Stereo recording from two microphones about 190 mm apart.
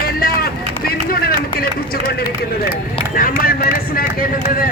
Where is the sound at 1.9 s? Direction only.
55° left (ahead or behind).